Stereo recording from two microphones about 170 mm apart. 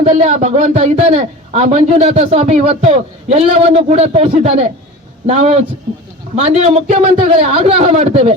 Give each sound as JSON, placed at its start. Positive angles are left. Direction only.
{"t": 0.0, "sound": "a man's voice", "side_deg": -40}